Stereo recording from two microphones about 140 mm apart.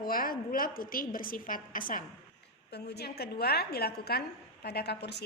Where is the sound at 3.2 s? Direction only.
90° left.